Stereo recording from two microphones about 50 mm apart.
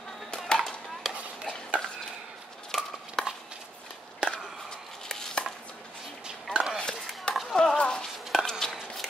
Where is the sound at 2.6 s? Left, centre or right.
Centre.